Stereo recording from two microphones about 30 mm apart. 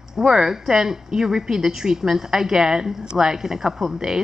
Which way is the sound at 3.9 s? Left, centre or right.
Right.